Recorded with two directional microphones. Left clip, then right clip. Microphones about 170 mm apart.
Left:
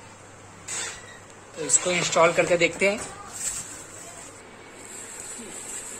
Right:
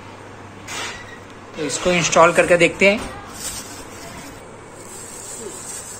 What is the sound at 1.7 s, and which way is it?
Speech, 10° left (ahead or behind).